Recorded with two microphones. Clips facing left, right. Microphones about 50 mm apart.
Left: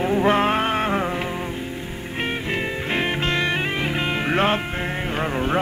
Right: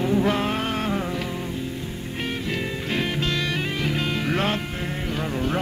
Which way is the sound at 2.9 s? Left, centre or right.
Left.